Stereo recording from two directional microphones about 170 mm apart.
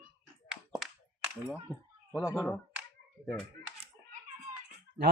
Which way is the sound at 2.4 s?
Centre (ahead or behind).